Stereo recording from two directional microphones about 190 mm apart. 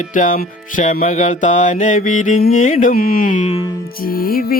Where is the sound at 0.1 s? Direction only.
45° left (ahead or behind).